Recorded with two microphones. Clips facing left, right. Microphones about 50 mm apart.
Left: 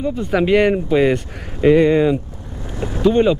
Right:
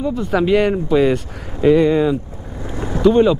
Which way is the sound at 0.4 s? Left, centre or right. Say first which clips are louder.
Left 1 dB; centre.